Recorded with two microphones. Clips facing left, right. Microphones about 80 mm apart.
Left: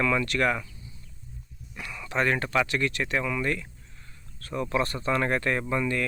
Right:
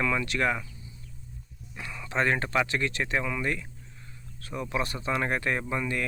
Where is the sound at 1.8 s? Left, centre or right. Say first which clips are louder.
Left 1 dB; right.